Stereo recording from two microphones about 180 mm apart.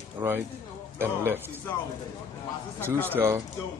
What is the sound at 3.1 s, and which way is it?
Speech, 15° right (ahead or behind).